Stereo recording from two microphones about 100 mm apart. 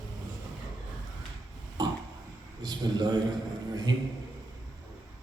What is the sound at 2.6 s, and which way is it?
Speech, 45° right (ahead or behind).